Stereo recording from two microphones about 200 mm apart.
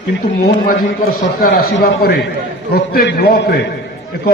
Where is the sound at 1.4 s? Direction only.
50° left (ahead or behind).